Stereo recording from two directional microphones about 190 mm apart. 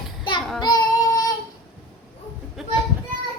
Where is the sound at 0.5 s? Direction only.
20° left (ahead or behind).